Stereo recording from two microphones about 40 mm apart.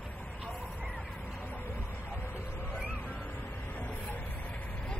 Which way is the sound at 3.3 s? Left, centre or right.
Left.